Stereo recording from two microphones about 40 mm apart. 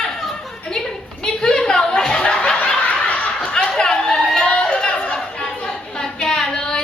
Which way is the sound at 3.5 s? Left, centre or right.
Centre.